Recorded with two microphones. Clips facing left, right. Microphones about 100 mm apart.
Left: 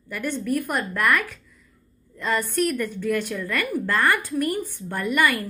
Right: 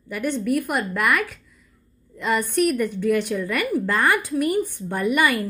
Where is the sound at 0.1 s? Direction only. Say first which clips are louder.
Right 3 dB; 15° right (ahead or behind).